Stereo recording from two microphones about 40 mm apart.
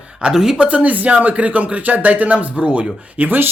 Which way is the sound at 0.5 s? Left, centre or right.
Right.